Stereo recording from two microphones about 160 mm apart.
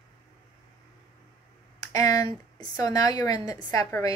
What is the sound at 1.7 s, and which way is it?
Speech, 25° left (ahead or behind).